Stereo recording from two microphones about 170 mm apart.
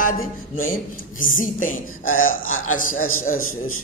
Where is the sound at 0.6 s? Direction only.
55° left (ahead or behind).